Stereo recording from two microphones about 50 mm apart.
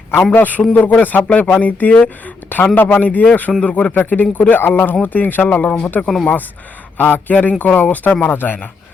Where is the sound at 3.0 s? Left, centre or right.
Left.